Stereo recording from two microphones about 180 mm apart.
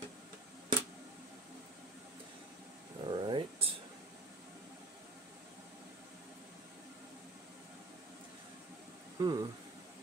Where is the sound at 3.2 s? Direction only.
30° right (ahead or behind).